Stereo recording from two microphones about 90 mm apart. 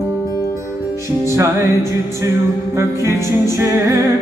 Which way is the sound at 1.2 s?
35° right (ahead or behind).